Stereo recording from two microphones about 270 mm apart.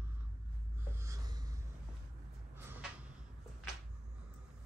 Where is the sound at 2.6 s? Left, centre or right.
Centre.